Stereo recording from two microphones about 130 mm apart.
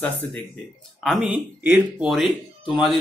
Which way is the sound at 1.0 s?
Centre (ahead or behind).